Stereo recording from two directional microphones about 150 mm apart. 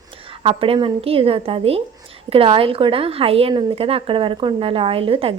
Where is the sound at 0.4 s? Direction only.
35° right (ahead or behind).